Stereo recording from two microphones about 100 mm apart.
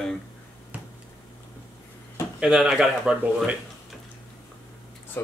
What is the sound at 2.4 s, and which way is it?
Speech, 5° right (ahead or behind).